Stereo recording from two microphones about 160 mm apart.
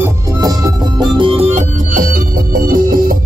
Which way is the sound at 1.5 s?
55° right (ahead or behind).